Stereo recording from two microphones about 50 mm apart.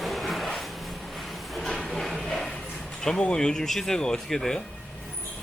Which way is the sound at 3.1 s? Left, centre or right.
Centre.